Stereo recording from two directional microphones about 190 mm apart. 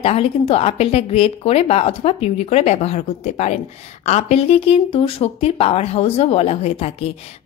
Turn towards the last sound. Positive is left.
turn(degrees=30)  # may be behind; listen again after turning